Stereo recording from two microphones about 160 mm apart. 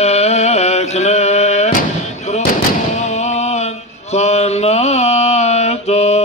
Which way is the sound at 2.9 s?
45° left (ahead or behind).